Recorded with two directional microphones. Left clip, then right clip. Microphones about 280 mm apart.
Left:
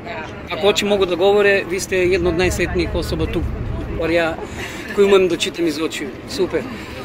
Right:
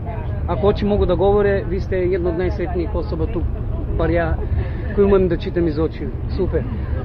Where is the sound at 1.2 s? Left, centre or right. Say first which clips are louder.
Left 4 dB; centre.